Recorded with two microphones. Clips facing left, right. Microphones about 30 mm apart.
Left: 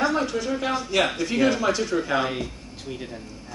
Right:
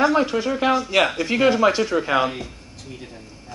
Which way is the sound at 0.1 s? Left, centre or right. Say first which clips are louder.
Right 5 dB; right.